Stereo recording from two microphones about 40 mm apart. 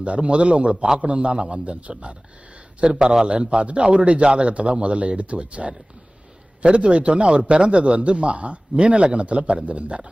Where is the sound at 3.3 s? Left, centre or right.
Right.